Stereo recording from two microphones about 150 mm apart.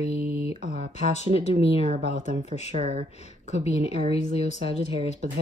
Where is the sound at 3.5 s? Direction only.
45° left (ahead or behind).